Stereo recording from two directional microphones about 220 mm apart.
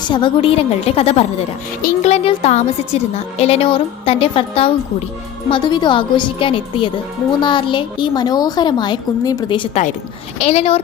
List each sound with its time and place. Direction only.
0.1 s a woman's voice: 20° left (ahead or behind)